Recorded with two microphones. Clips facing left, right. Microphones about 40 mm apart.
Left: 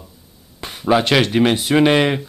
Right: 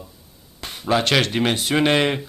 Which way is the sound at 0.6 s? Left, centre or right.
Centre.